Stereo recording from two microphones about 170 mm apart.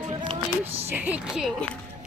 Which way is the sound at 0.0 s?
30° right (ahead or behind).